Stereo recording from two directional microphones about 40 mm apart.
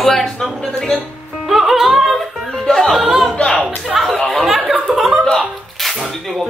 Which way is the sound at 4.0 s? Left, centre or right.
Centre.